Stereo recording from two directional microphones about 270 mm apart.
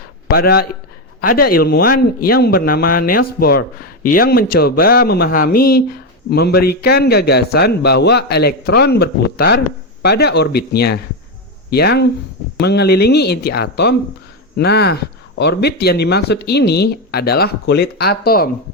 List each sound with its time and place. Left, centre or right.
0.3 s a man's voice: left